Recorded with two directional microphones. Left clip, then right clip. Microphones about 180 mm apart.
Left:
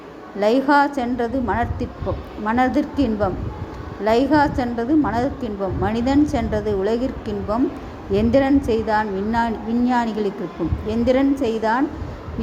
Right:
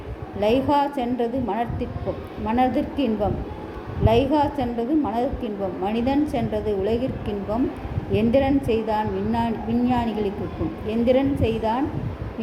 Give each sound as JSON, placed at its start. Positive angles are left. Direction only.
{"t": 0.3, "sound": "a woman's voice", "side_deg": 20}